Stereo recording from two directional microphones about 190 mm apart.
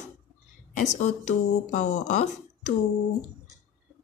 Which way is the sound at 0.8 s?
40° left (ahead or behind).